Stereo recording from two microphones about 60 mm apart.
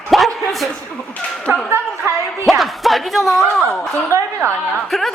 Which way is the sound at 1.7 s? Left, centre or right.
Right.